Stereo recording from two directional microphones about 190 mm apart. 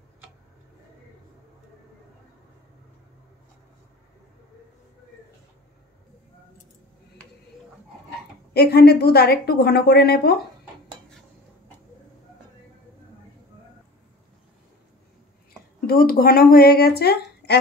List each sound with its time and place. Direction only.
8.5 s a woman's voice: 55° left (ahead or behind)
15.9 s speech: 50° left (ahead or behind)